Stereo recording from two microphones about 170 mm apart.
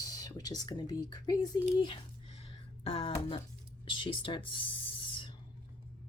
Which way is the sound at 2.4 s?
35° left (ahead or behind).